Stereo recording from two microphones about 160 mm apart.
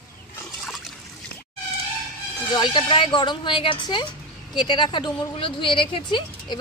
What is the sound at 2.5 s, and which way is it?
Speech, 30° left (ahead or behind).